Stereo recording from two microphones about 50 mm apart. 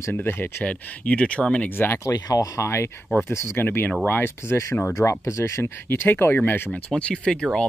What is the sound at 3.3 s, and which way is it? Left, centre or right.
Speech, left.